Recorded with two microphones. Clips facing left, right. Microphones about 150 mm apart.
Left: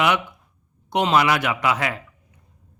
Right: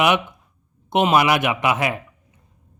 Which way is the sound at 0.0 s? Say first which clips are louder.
Right 2 dB; 20° right (ahead or behind).